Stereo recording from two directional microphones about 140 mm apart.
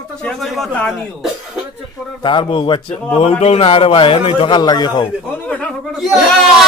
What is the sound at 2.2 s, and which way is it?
A man's voice, 35° left (ahead or behind).